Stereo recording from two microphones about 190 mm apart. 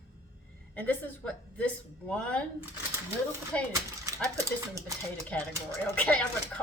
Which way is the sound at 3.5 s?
5° left (ahead or behind).